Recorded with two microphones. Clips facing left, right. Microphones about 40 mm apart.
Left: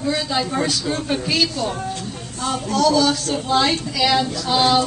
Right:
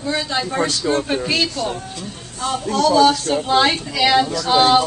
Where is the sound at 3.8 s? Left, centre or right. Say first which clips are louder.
Right 3 dB; centre.